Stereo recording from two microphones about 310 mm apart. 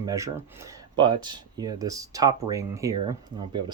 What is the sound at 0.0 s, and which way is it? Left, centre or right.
Speech, centre.